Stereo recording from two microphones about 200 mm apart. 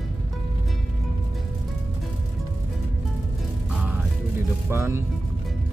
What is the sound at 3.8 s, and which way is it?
Music, 5° right (ahead or behind).